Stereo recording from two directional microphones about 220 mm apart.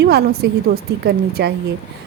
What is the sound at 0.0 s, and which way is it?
Speech, 45° right (ahead or behind).